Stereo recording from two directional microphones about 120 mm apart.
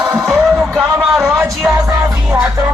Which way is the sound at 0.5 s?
Centre (ahead or behind).